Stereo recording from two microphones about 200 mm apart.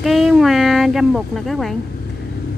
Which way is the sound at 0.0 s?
Centre (ahead or behind).